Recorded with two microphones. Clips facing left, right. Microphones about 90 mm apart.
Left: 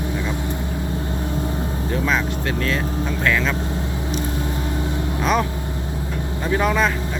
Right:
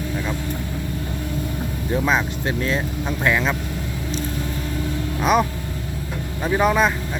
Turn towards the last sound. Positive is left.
turn(degrees=-15)  # may be behind; listen again after turning